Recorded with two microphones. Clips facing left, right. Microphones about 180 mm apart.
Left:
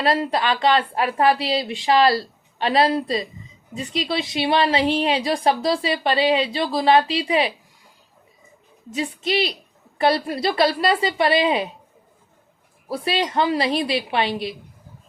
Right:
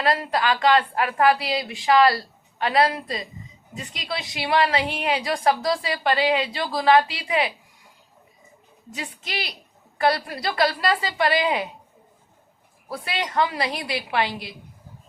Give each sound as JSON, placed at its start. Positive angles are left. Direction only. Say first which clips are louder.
{"t": 0.0, "sound": "a woman's voice", "louder": "left 2 dB", "side_deg": 25}
{"t": 8.9, "sound": "a woman's voice", "louder": "left 10 dB", "side_deg": 25}
{"t": 12.9, "sound": "a woman's voice", "louder": "left 6 dB", "side_deg": 25}